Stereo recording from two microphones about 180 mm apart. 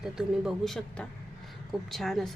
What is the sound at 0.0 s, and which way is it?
A woman's voice, centre (ahead or behind).